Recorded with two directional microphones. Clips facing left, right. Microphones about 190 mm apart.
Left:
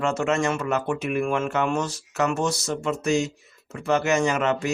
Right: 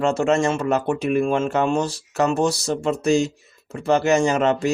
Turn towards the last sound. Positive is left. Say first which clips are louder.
# right 4 dB
turn(degrees=-35)  # may be behind; listen again after turning